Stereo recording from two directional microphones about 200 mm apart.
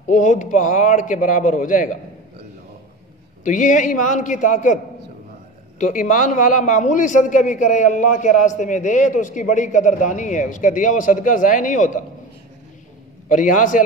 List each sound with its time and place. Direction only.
0.1 s a man's voice: 40° left (ahead or behind)
3.4 s a man's voice: 40° left (ahead or behind)
5.8 s a man's voice: 40° left (ahead or behind)
13.3 s a man's voice: 40° left (ahead or behind)